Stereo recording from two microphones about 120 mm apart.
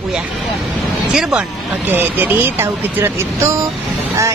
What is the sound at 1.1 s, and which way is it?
Speech, 5° right (ahead or behind).